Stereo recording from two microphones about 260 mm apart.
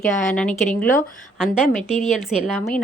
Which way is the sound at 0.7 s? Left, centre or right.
Left.